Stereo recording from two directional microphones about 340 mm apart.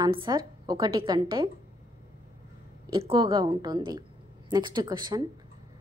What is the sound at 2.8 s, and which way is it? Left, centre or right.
A woman's voice, centre.